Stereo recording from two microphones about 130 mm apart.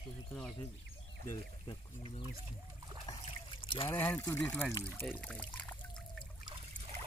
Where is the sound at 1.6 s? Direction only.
45° left (ahead or behind).